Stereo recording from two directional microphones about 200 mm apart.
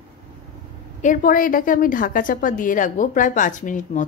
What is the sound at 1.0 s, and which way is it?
A woman's voice, 45° left (ahead or behind).